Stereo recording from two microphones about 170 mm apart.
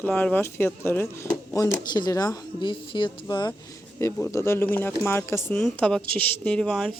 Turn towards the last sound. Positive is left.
turn(degrees=5)  # may be behind; listen again after turning